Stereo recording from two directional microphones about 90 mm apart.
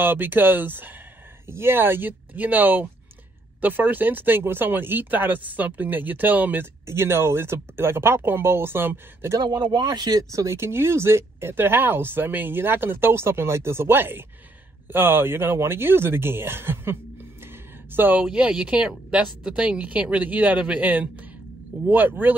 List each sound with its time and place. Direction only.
0.0 s speech: 20° right (ahead or behind)
9.4 s speech: 55° right (ahead or behind); by 18.2 s 20° right (ahead or behind)
18.2 s speech: 5° right (ahead or behind)